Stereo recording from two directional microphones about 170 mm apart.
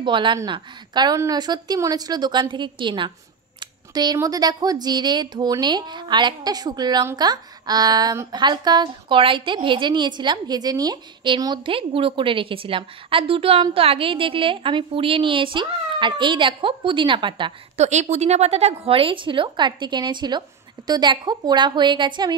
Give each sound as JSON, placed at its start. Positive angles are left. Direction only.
{"t": 0.0, "sound": "speech", "side_deg": -30}
{"t": 17.8, "sound": "speech", "side_deg": -40}